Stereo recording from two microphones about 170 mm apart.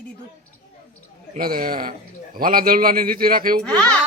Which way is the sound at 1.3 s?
55° right (ahead or behind).